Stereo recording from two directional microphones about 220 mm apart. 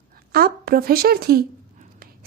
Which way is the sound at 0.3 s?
45° right (ahead or behind).